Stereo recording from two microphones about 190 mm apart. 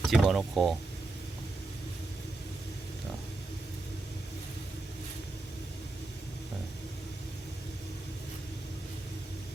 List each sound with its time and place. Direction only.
0.0 s speech: centre (ahead or behind)